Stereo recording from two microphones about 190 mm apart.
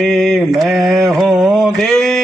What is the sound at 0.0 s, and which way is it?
Mantra, centre (ahead or behind).